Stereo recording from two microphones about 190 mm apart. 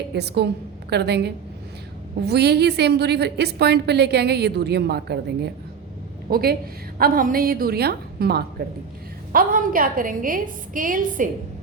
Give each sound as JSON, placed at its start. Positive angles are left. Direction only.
{"t": 0.1, "sound": "a woman's voice", "side_deg": -60}